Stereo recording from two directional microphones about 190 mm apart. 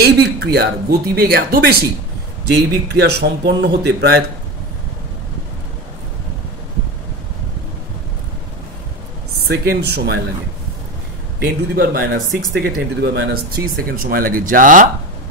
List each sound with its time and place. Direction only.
0.0 s speech: 55° right (ahead or behind)
9.5 s speech: 60° right (ahead or behind)
11.3 s speech: 55° right (ahead or behind)